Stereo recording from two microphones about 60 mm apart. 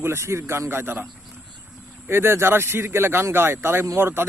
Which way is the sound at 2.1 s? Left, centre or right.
Right.